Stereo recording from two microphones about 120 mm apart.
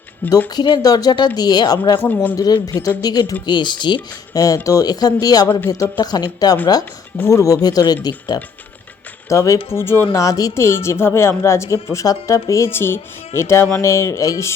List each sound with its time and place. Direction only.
0.5 s speech: 35° left (ahead or behind)
2.0 s speech: 15° left (ahead or behind)
2.3 s speech: 35° left (ahead or behind)
2.7 s speech: 20° left (ahead or behind)
3.0 s speech: 35° left (ahead or behind)
5.5 s speech: 20° left (ahead or behind)
6.0 s speech: 35° left (ahead or behind)